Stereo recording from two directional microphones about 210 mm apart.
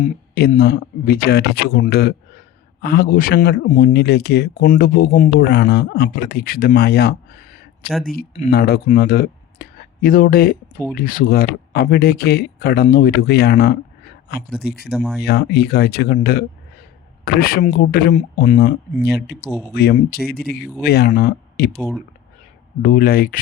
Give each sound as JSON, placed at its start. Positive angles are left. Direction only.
{"t": 0.3, "sound": "speech", "side_deg": 50}
{"t": 5.5, "sound": "speech", "side_deg": 55}
{"t": 7.9, "sound": "speech", "side_deg": 0}
{"t": 8.1, "sound": "speech", "side_deg": 45}
{"t": 18.6, "sound": "speech", "side_deg": 50}
{"t": 19.5, "sound": "speech", "side_deg": -5}
{"t": 19.7, "sound": "speech", "side_deg": 50}
{"t": 22.8, "sound": "speech", "side_deg": 40}